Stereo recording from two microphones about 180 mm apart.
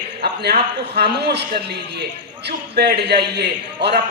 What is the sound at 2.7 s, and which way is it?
A man's voice, 65° right (ahead or behind).